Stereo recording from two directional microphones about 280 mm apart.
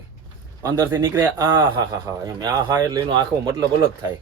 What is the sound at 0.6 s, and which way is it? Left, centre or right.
Speech, centre.